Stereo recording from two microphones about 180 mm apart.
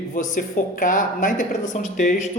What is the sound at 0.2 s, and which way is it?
A man's voice, 50° left (ahead or behind).